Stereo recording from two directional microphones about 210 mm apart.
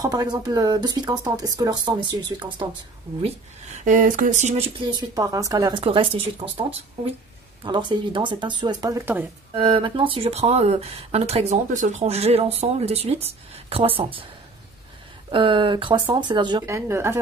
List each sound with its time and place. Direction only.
0.0 s speech: 15° right (ahead or behind); by 4.6 s 35° right (ahead or behind)
4.8 s speech: 15° right (ahead or behind)
9.5 s speech: 25° right (ahead or behind)
15.3 s speech: 25° right (ahead or behind)